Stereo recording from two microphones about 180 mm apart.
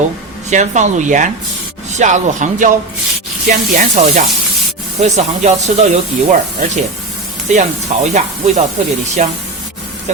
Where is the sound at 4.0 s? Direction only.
45° right (ahead or behind).